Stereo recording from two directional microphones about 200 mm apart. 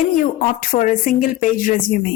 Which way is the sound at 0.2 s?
40° left (ahead or behind).